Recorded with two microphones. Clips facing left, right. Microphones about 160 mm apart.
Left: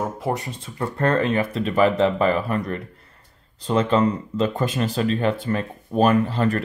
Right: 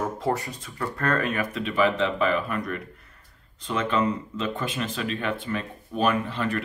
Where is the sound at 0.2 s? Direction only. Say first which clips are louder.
Left 1 dB; 20° left (ahead or behind).